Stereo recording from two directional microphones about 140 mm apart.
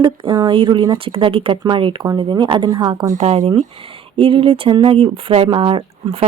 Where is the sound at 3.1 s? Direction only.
50° right (ahead or behind).